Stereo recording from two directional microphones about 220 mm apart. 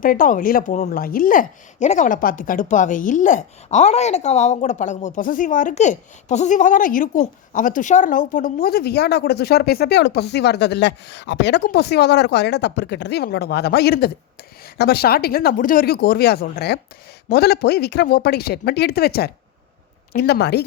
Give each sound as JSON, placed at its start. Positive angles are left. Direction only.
{"t": 0.0, "sound": "speech", "side_deg": 40}